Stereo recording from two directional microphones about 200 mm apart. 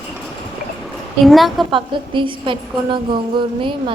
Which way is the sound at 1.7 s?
25° right (ahead or behind).